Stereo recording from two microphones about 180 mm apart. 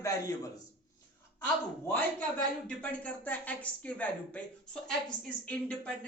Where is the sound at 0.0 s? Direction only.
20° left (ahead or behind).